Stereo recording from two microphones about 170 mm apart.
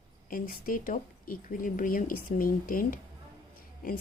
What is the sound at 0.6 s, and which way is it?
A woman's voice, 55° left (ahead or behind).